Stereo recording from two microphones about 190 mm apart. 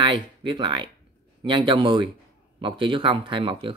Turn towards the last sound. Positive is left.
turn(degrees=-25)  # may be behind; listen again after turning